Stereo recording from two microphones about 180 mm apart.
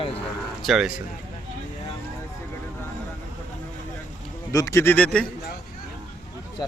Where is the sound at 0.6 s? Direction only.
Centre (ahead or behind).